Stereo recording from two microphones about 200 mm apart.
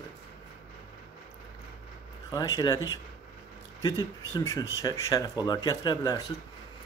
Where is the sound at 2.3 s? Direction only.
20° left (ahead or behind).